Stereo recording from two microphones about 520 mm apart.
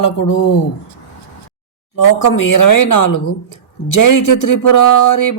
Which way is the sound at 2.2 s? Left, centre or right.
Left.